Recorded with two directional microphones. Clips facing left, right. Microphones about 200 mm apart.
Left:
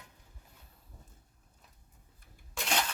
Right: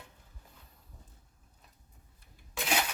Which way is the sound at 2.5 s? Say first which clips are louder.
Right 2 dB; 5° right (ahead or behind).